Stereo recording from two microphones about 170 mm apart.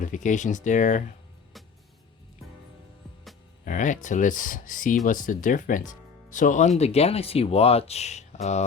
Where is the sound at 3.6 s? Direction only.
50° left (ahead or behind).